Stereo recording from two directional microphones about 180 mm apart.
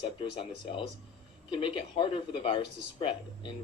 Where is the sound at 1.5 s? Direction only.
30° left (ahead or behind).